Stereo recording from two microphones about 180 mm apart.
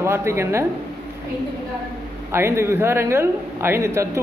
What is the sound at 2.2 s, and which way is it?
A man's voice, 15° right (ahead or behind).